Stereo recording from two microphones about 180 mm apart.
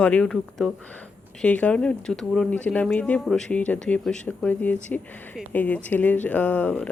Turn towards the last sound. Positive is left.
turn(degrees=10)  # may be behind; listen again after turning